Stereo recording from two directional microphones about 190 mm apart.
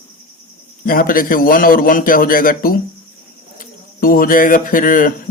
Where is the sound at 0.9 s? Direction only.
50° left (ahead or behind).